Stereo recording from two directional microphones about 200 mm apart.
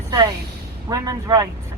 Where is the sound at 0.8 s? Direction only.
20° right (ahead or behind).